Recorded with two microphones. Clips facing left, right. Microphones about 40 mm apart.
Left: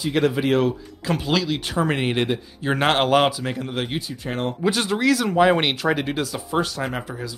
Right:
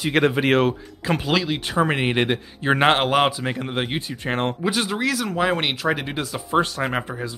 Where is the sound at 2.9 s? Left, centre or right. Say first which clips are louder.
Left 1 dB; centre.